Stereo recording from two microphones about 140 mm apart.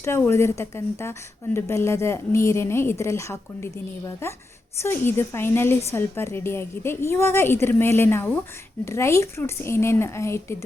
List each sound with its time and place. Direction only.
0.0 s a woman's voice: 20° left (ahead or behind)